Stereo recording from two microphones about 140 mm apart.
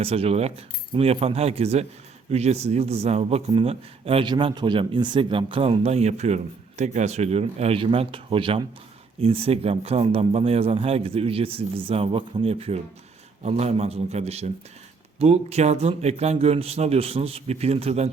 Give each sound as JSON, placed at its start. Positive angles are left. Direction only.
{"t": 0.0, "sound": "a man's voice", "side_deg": -45}